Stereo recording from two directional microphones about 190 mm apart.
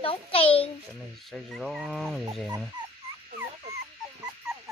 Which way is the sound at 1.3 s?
Centre (ahead or behind).